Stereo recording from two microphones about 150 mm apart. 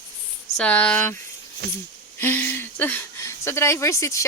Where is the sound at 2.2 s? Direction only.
10° left (ahead or behind).